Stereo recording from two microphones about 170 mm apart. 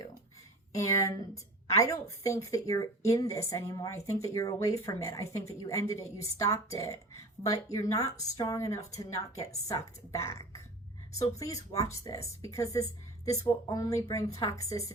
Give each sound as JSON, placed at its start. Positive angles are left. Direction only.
{"t": 0.7, "sound": "a woman's voice", "side_deg": 20}